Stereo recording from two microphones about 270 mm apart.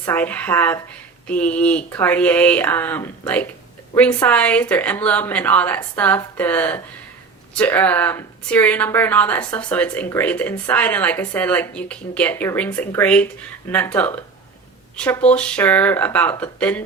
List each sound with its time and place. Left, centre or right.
0.0 s a woman's voice: centre